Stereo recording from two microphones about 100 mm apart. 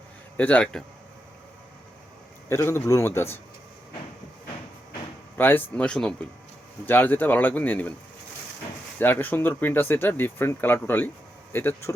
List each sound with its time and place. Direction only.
0.3 s speech: 15° left (ahead or behind)
2.5 s speech: 25° left (ahead or behind)
5.4 s speech: 20° left (ahead or behind)
9.0 s speech: 20° left (ahead or behind)